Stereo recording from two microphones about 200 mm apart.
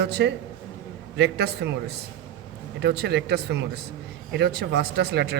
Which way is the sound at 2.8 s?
55° right (ahead or behind).